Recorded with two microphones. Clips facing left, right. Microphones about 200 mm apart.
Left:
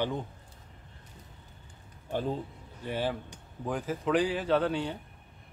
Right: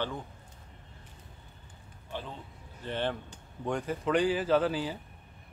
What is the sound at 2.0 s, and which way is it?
Speech, 45° left (ahead or behind).